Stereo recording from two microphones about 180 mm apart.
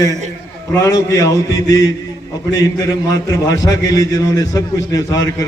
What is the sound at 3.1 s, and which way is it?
A man's voice, 20° left (ahead or behind).